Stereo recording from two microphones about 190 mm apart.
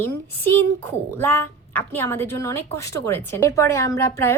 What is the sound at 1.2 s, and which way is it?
A woman's voice, 10° left (ahead or behind).